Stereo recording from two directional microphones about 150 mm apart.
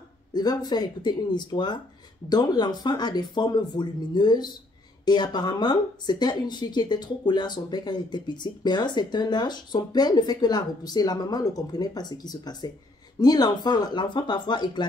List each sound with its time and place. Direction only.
0.3 s speech: 25° left (ahead or behind)